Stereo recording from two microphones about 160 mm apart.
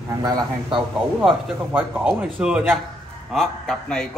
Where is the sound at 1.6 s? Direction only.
10° right (ahead or behind).